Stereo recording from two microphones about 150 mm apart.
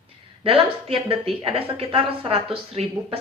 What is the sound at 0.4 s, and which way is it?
Speech, 40° right (ahead or behind).